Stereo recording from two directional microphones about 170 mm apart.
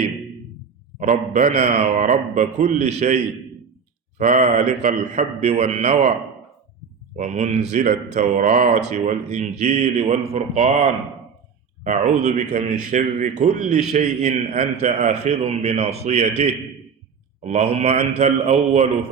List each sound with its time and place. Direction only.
0.9 s a man's voice: 45° right (ahead or behind)
4.2 s a man's voice: 45° right (ahead or behind)
7.2 s a man's voice: 40° right (ahead or behind)